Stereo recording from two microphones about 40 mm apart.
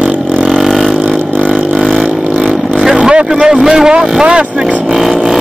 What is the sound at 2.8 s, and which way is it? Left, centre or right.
Vehicle, centre.